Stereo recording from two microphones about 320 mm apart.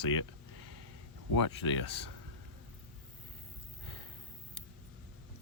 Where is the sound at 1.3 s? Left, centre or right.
Left.